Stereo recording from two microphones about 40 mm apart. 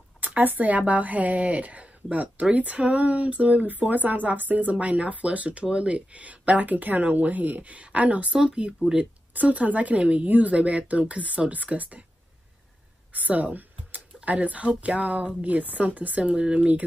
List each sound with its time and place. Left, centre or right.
0.4 s speech: right
8.3 s speech: centre
9.3 s speech: right
13.1 s a sound: right
15.0 s speech: right
16.3 s speech: right